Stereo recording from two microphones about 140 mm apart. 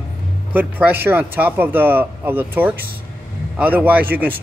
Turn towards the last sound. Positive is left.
turn(degrees=-15)  # may be behind; listen again after turning